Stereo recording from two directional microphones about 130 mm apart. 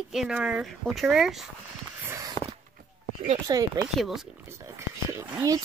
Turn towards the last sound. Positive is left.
turn(degrees=-25)  # may be behind; listen again after turning